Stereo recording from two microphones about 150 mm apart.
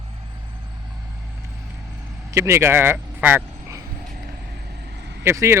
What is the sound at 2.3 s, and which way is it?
Speech, 20° right (ahead or behind).